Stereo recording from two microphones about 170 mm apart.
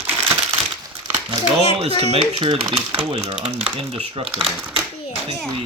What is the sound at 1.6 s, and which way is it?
Speech, 35° right (ahead or behind).